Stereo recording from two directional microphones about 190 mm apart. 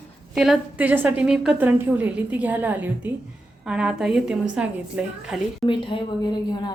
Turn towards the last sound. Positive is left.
turn(degrees=25)  # may be behind; listen again after turning